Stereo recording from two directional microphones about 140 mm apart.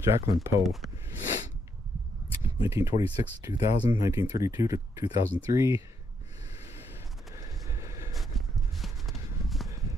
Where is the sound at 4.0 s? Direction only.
20° right (ahead or behind).